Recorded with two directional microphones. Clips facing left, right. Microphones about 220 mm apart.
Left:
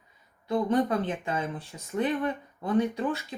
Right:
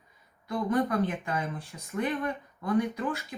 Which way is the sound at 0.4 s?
25° left (ahead or behind).